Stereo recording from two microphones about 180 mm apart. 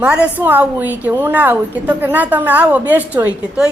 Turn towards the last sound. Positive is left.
turn(degrees=-5)  # may be behind; listen again after turning